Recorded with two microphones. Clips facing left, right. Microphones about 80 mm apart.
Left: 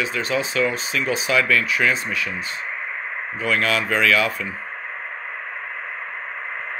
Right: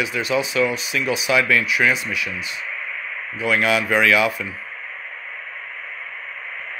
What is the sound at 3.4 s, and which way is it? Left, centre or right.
Speech, centre.